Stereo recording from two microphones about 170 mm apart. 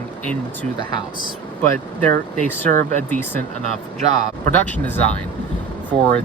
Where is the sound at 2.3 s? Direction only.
45° right (ahead or behind).